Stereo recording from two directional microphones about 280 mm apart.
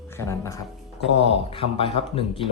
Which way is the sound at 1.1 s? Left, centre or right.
Left.